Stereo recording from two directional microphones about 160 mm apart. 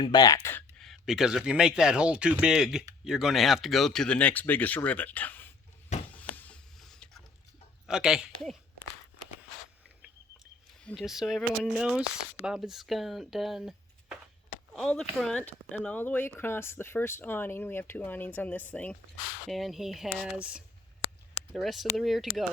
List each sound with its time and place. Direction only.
0.0 s speech: 25° left (ahead or behind)
0.8 s speech: centre (ahead or behind)
6.1 s mechanisms: 10° left (ahead or behind)
7.9 s speech: 5° right (ahead or behind)
10.8 s speech: centre (ahead or behind)